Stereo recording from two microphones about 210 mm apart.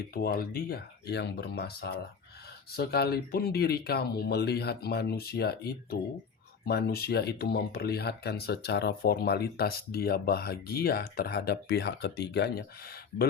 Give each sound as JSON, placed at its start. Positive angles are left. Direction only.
{"t": 0.1, "sound": "speech", "side_deg": 45}